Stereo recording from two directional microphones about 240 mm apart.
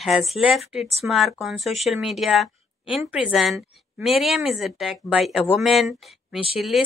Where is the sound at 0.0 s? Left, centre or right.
Centre.